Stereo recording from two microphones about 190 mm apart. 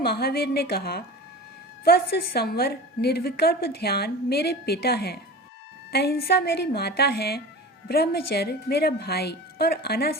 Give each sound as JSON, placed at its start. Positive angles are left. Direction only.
{"t": 0.0, "sound": "a woman's voice", "side_deg": 55}